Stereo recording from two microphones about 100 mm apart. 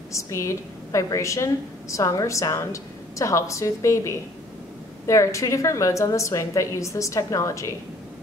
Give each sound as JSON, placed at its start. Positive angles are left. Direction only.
{"t": 0.1, "sound": "a woman's voice", "side_deg": 30}